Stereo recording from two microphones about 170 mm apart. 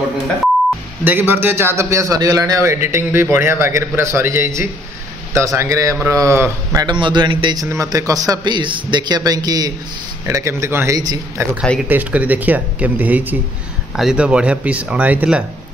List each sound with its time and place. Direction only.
1.0 s a man's voice: 10° right (ahead or behind)
11.9 s a man's voice: 10° right (ahead or behind)